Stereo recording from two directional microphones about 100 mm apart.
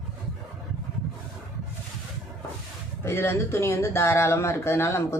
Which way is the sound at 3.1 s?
25° left (ahead or behind).